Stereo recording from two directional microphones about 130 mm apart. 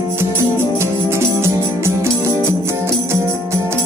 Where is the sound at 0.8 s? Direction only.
20° right (ahead or behind).